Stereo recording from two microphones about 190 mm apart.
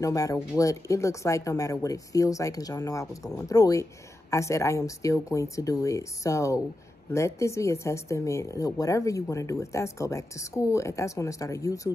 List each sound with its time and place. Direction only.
0.0 s speech: 15° left (ahead or behind)